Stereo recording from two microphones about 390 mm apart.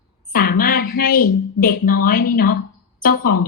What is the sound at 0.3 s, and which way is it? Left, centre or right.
A woman's voice, left.